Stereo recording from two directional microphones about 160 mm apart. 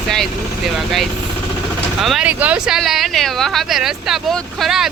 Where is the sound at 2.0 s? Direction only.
Centre (ahead or behind).